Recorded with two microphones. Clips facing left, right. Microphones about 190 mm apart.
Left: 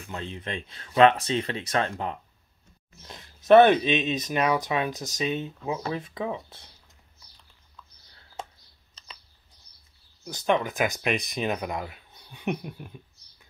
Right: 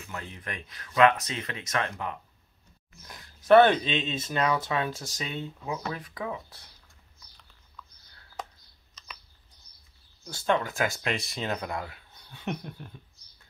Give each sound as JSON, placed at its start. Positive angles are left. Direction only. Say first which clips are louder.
{"t": 0.1, "sound": "speech", "louder": "left 5 dB", "side_deg": 25}
{"t": 8.9, "sound": "typing", "louder": "right 2 dB", "side_deg": 30}
{"t": 10.2, "sound": "speech", "louder": "left 2 dB", "side_deg": 15}